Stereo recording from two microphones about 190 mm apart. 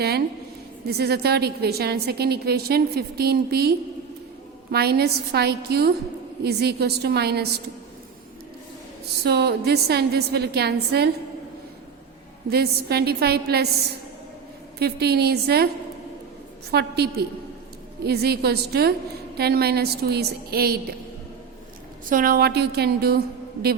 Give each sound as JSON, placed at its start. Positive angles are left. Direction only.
{"t": 0.9, "sound": "a woman's voice", "side_deg": -60}
{"t": 9.2, "sound": "a woman's voice", "side_deg": -60}
{"t": 12.5, "sound": "a woman's voice", "side_deg": -55}
{"t": 14.8, "sound": "a woman's voice", "side_deg": -55}
{"t": 16.7, "sound": "a woman's voice", "side_deg": -60}
{"t": 22.1, "sound": "a woman's voice", "side_deg": -50}